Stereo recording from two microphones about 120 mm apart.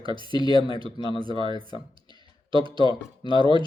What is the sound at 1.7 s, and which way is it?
Clicking, 45° right (ahead or behind).